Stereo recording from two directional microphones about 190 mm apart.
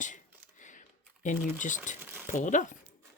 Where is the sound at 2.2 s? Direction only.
40° left (ahead or behind).